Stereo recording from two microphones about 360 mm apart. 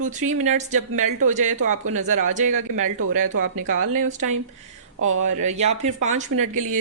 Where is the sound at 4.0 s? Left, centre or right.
Centre.